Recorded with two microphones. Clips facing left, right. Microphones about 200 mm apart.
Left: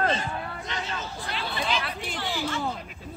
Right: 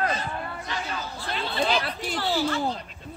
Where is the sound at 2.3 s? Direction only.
40° right (ahead or behind).